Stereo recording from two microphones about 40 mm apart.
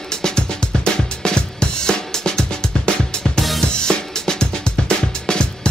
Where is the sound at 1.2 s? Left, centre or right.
Centre.